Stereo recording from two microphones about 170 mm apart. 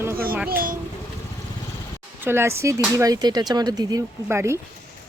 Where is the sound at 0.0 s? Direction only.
15° right (ahead or behind).